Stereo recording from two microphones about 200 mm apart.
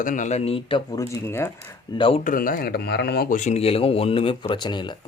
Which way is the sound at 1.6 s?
25° left (ahead or behind).